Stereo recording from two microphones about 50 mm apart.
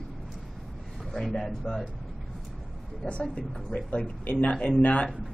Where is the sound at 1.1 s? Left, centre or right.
Centre.